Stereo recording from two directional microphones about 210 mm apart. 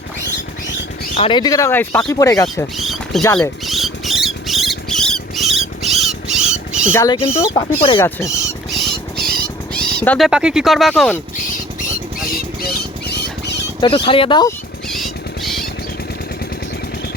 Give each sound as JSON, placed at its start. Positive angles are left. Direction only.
{"t": 1.1, "sound": "speech", "side_deg": 25}
{"t": 2.7, "sound": "a sound", "side_deg": 0}
{"t": 6.9, "sound": "speech", "side_deg": 15}
{"t": 8.7, "sound": "a sound", "side_deg": 0}
{"t": 9.7, "sound": "speech", "side_deg": 5}
{"t": 12.7, "sound": "rodents", "side_deg": 55}
{"t": 13.8, "sound": "speech", "side_deg": 25}
{"t": 14.8, "sound": "music", "side_deg": 0}